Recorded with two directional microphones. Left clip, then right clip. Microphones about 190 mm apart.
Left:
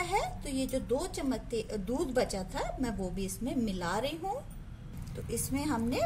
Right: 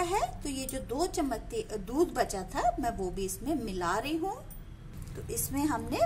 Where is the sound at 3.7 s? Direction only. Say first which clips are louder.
Right 5 dB; 20° right (ahead or behind).